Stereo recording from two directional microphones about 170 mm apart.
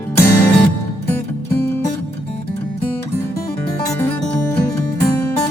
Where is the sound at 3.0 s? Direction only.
20° left (ahead or behind).